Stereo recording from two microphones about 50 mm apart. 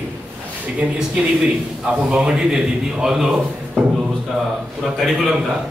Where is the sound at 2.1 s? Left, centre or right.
Centre.